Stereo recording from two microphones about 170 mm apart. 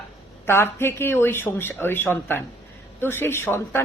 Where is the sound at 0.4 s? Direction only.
15° left (ahead or behind).